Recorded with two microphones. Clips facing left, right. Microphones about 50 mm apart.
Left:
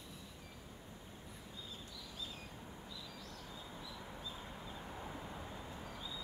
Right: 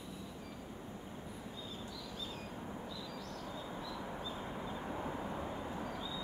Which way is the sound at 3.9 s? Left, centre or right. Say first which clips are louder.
Right 7 dB; right.